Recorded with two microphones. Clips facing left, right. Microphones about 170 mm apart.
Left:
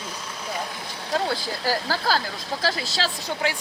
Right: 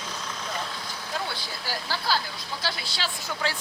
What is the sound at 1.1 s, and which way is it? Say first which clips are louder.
Speech: left 9 dB; 40° left (ahead or behind).